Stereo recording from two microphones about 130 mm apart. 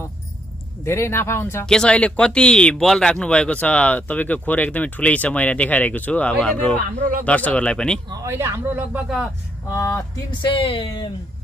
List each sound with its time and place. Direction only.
0.8 s speech: 20° left (ahead or behind)
1.7 s speech: 5° left (ahead or behind)
8.1 s speech: 25° right (ahead or behind)
9.7 s speech: 25° left (ahead or behind)
10.4 s speech: 40° left (ahead or behind)